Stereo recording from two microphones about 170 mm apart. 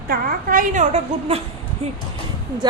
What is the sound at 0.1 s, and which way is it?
A woman's voice, 55° right (ahead or behind).